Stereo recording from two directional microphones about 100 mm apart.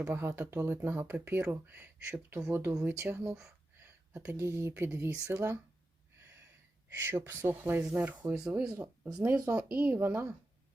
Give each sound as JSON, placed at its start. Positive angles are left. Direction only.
{"t": 0.0, "sound": "speech", "side_deg": -20}
{"t": 3.8, "sound": "a sound", "side_deg": -30}
{"t": 4.4, "sound": "speech", "side_deg": -25}
{"t": 7.0, "sound": "speech", "side_deg": -25}